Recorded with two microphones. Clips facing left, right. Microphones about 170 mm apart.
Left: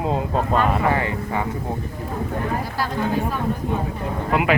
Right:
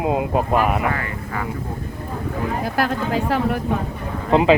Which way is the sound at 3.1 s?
90° right.